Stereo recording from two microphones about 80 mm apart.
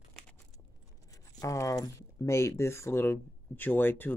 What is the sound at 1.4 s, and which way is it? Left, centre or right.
Speech, left.